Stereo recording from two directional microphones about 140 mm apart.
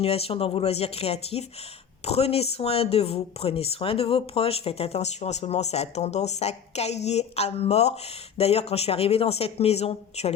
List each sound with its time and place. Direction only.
0.0 s speech: 45° left (ahead or behind)